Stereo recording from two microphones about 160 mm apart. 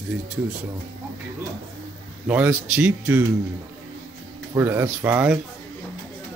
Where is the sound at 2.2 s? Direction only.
10° right (ahead or behind).